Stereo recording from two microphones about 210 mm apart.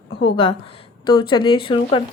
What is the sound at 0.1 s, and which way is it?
Speech, 50° left (ahead or behind).